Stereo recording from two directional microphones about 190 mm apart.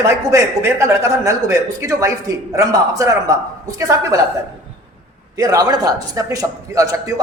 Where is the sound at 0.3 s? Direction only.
15° right (ahead or behind).